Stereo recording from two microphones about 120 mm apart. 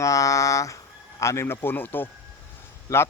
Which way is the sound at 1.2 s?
25° left (ahead or behind).